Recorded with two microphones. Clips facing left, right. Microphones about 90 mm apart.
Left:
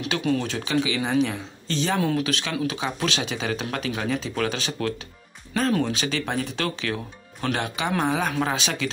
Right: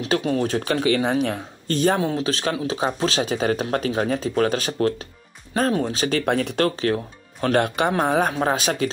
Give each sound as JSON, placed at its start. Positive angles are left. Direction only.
{"t": 0.0, "sound": "speech", "side_deg": -30}
{"t": 2.0, "sound": "speech", "side_deg": -25}
{"t": 6.0, "sound": "speech", "side_deg": -50}
{"t": 6.6, "sound": "speech", "side_deg": -40}
{"t": 7.4, "sound": "speech", "side_deg": -50}